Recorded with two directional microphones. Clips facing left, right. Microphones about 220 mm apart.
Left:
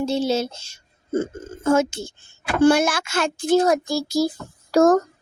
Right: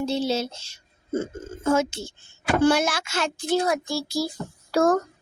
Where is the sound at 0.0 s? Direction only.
50° left (ahead or behind).